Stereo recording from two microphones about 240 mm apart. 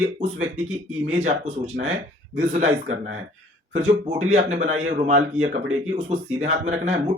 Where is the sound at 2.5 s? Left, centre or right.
Right.